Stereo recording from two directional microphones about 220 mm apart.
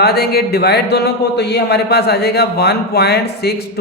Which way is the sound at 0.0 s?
45° left (ahead or behind).